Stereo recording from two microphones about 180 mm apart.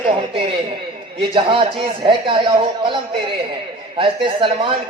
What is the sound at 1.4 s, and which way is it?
Speech, 30° right (ahead or behind).